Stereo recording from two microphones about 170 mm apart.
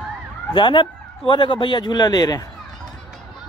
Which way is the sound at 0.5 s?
30° left (ahead or behind).